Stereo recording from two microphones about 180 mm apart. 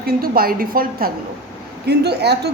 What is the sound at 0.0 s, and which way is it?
A woman's voice, 55° right (ahead or behind).